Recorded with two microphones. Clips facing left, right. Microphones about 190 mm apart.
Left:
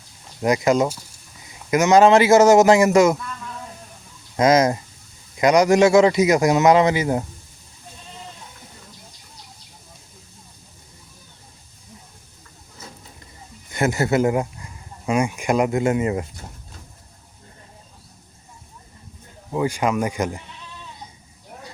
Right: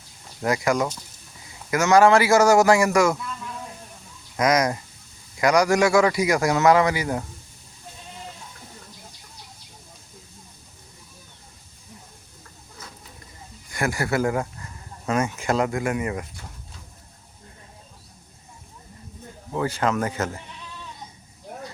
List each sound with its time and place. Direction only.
0.4 s a man's voice: 20° left (ahead or behind)
4.4 s a man's voice: 25° left (ahead or behind)
13.7 s speech: 25° left (ahead or behind)
19.5 s speech: 15° left (ahead or behind)